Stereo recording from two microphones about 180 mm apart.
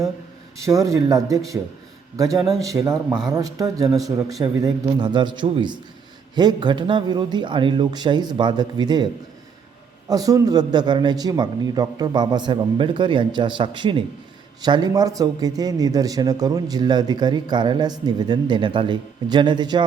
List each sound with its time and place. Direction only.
0.5 s a man's voice: 15° right (ahead or behind)
3.1 s speech: 5° right (ahead or behind)
3.3 s a man's voice: 20° right (ahead or behind)
10.1 s a man's voice: 20° right (ahead or behind)